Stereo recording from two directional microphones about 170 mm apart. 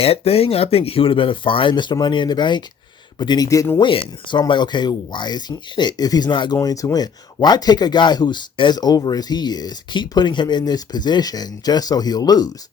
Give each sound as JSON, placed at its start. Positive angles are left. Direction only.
{"t": 0.0, "sound": "speech", "side_deg": 35}